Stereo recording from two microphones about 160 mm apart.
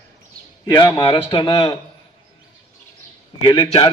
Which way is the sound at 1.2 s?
30° left (ahead or behind).